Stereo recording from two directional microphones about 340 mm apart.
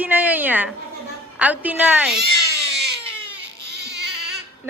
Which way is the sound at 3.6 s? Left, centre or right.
Right.